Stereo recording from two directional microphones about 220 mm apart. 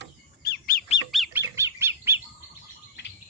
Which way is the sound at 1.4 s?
15° right (ahead or behind).